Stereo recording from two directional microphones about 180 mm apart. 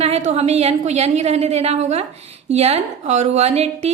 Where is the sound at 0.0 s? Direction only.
35° right (ahead or behind).